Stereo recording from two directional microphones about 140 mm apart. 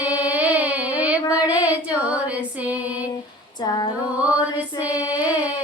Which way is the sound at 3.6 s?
30° left (ahead or behind).